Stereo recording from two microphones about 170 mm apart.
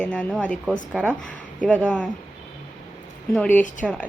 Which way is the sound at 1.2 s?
5° left (ahead or behind).